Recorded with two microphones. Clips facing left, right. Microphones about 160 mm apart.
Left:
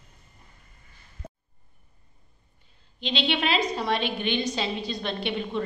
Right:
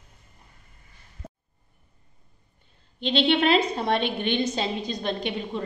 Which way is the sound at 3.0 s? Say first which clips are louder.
Right 5 dB; 55° right (ahead or behind).